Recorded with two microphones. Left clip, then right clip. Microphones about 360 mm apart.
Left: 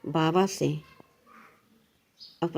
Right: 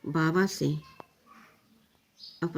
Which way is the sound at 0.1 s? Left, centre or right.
Centre.